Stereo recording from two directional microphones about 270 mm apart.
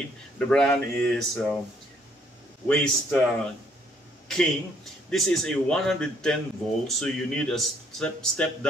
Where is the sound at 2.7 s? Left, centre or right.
Centre.